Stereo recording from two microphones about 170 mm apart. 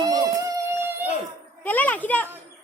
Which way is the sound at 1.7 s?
10° left (ahead or behind).